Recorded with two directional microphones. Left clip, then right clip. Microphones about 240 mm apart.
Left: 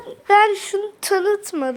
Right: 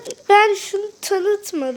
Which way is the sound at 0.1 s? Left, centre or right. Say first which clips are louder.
Right 1 dB; right.